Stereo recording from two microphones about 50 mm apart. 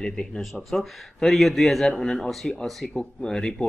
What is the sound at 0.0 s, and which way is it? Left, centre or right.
Speech, centre.